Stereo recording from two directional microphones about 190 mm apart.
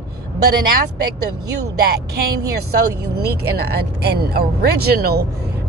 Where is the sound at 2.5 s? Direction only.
60° right (ahead or behind).